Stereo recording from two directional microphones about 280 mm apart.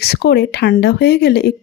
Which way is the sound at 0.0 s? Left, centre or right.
Left.